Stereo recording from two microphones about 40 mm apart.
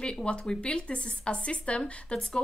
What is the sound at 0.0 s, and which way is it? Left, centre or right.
Speech, left.